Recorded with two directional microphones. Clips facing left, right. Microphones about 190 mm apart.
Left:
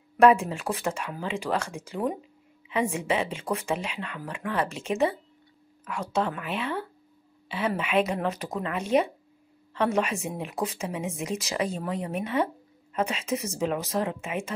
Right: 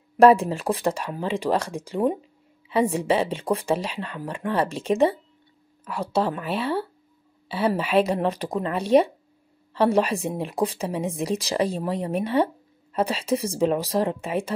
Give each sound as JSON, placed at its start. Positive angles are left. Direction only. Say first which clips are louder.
{"t": 0.2, "sound": "a woman's voice", "louder": "right 4 dB", "side_deg": -35}
{"t": 6.1, "sound": "a woman's voice", "louder": "right 4 dB", "side_deg": -35}